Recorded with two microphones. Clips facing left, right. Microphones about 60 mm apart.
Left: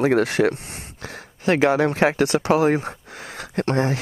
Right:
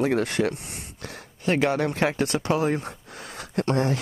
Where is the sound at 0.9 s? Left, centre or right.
Left.